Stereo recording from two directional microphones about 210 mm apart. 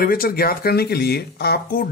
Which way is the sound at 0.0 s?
45° left (ahead or behind).